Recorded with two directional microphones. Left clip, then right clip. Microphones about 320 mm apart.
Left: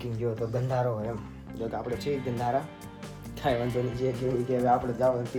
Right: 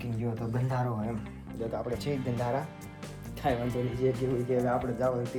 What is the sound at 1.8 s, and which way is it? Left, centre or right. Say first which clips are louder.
Speech: left 2 dB; centre.